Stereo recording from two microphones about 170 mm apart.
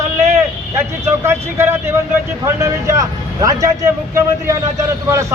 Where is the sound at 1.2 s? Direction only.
15° right (ahead or behind).